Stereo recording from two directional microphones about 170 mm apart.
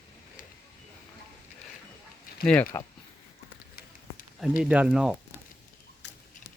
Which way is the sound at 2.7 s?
15° left (ahead or behind).